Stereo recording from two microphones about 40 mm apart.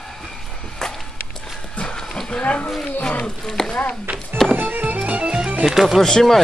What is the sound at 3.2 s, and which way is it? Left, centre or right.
Speech, centre.